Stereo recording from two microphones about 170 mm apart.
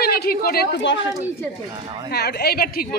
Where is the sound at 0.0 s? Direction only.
65° left (ahead or behind).